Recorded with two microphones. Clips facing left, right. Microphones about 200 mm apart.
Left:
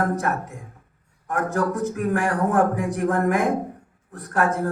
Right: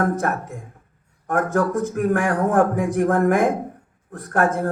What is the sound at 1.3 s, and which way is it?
Speech, 50° right (ahead or behind).